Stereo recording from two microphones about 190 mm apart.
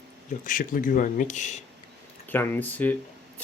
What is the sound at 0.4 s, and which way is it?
Speech, 45° left (ahead or behind).